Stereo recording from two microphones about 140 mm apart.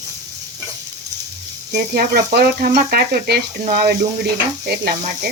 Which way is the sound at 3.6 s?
70° right (ahead or behind).